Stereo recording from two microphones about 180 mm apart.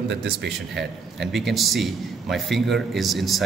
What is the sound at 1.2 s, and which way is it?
A man's voice, centre (ahead or behind).